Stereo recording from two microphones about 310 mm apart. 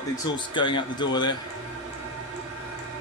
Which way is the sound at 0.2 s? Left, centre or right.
Centre.